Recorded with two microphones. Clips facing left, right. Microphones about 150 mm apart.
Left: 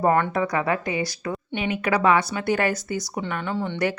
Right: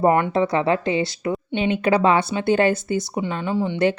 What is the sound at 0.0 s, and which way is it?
Speech, 20° right (ahead or behind).